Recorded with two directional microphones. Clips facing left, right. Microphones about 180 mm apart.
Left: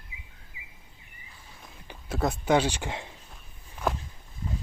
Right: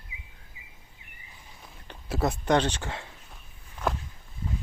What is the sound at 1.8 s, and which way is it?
Speech, centre (ahead or behind).